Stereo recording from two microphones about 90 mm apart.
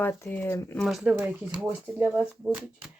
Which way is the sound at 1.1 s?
15° right (ahead or behind).